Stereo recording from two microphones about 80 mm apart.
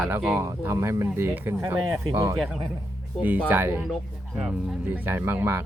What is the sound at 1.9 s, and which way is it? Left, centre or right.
Speech, right.